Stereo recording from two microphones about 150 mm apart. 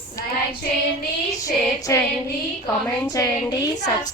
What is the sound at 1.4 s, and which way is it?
A woman's voice, 20° left (ahead or behind).